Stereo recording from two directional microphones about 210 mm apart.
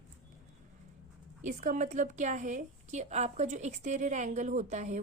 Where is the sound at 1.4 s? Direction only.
35° right (ahead or behind).